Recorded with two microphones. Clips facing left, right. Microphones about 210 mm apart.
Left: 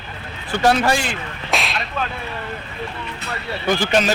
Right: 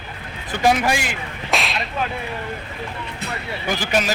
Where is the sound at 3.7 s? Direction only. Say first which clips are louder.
Left 4 dB; 10° right (ahead or behind).